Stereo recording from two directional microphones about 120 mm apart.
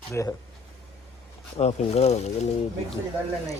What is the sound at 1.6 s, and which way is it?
Speech, 65° left (ahead or behind).